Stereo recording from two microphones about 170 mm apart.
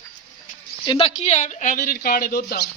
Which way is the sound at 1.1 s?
40° left (ahead or behind).